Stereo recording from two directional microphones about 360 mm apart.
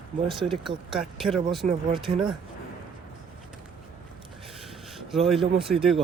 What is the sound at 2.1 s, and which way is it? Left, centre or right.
Speech, centre.